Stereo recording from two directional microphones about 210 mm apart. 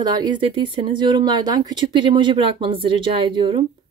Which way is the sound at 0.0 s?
20° right (ahead or behind).